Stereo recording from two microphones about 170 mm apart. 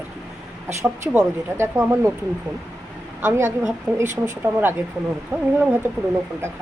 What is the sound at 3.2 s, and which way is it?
Speech, 15° right (ahead or behind).